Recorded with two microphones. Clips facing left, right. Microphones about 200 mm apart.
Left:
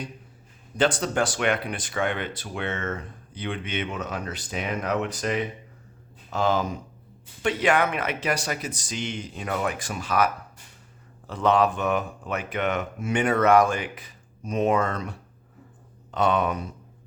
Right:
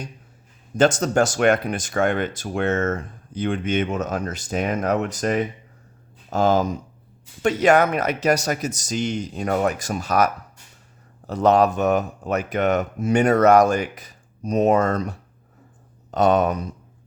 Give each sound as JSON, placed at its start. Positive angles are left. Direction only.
{"t": 0.8, "sound": "speech", "side_deg": -45}
{"t": 16.1, "sound": "speech", "side_deg": -40}